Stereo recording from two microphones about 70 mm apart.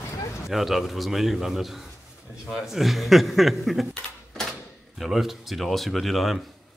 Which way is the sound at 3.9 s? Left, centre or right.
Centre.